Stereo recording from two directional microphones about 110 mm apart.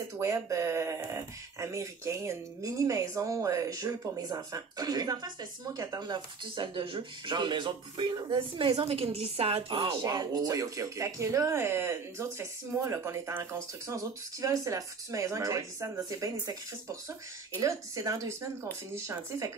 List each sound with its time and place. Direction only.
0.2 s speech: 30° right (ahead or behind); by 9.8 s 65° right (ahead or behind)
10.0 s speech: 35° right (ahead or behind)